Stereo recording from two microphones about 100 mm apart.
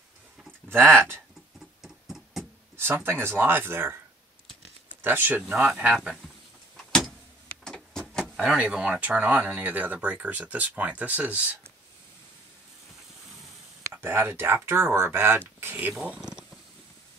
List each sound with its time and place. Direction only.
0.7 s speech: 20° right (ahead or behind)
1.8 s music: 5° right (ahead or behind)
2.8 s speech: 25° right (ahead or behind)
5.0 s speech: 20° right (ahead or behind)
5.5 s speech: 10° right (ahead or behind)
7.6 s vehicle: 5° left (ahead or behind)
8.4 s speech: 10° right (ahead or behind)
14.0 s speech: 25° right (ahead or behind)
16.2 s mechanisms: 5° right (ahead or behind)